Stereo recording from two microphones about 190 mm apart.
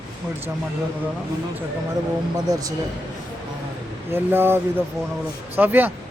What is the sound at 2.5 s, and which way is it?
Speech, 20° right (ahead or behind).